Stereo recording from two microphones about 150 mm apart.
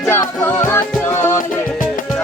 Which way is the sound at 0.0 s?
15° left (ahead or behind).